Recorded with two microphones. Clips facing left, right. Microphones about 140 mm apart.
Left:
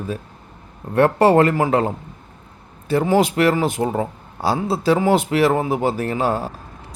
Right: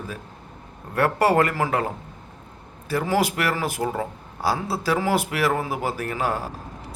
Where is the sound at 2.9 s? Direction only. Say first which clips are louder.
Left 6 dB; 25° left (ahead or behind).